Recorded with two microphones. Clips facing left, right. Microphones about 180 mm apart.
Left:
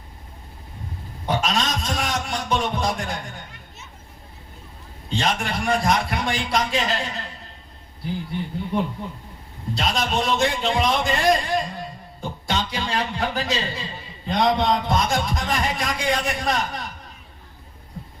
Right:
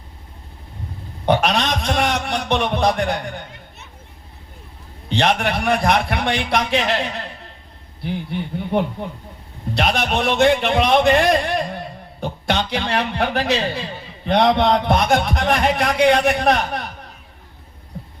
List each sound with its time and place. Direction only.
1.2 s a man's voice: 70° right (ahead or behind)
5.0 s a man's voice: 70° right (ahead or behind)
8.0 s a man's voice: 75° right (ahead or behind)